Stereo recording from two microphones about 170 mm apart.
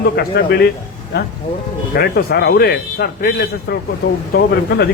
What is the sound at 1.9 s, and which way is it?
A man's voice, 70° left (ahead or behind).